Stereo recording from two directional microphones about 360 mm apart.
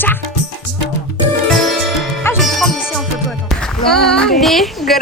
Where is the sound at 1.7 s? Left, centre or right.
Centre.